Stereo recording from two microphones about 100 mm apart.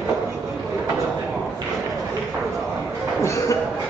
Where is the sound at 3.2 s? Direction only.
30° left (ahead or behind).